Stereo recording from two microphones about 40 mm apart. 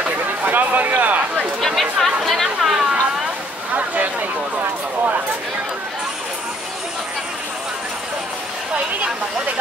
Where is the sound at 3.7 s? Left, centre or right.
Right.